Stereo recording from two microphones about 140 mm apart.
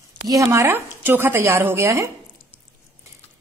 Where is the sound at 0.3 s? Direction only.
20° right (ahead or behind).